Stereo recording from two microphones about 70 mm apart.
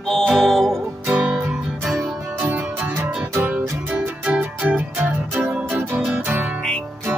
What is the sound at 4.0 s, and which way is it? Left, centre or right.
Music, centre.